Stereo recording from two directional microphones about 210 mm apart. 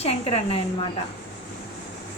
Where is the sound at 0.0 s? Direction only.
30° left (ahead or behind).